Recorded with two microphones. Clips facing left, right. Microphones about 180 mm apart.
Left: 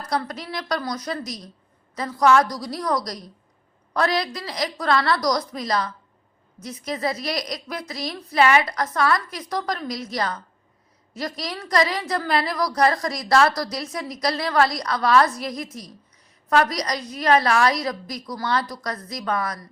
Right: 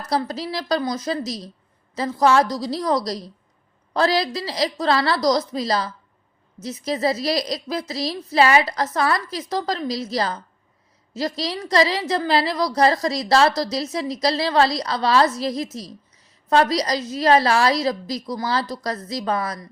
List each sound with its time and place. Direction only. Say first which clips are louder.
0.1 s a woman's voice: right 4 dB; 30° right (ahead or behind)